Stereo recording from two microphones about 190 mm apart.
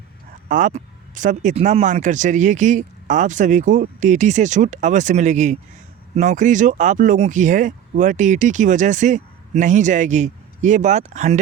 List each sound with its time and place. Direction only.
0.4 s speech: 45° right (ahead or behind)